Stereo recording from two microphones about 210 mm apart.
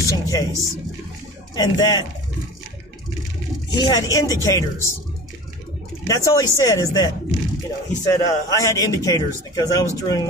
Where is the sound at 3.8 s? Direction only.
15° left (ahead or behind).